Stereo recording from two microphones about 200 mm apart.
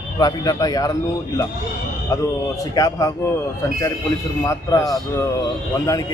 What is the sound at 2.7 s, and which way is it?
Speech, 15° left (ahead or behind).